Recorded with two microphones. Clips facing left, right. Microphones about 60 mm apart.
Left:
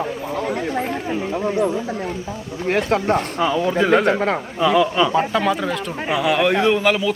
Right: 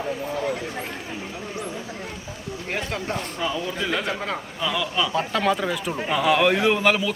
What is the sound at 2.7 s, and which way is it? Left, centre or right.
Speech, left.